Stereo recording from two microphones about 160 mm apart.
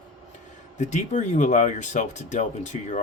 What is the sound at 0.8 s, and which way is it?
Speech, 45° left (ahead or behind).